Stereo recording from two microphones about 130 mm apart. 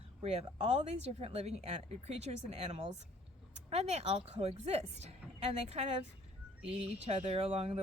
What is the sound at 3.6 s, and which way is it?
Speech, 55° right (ahead or behind).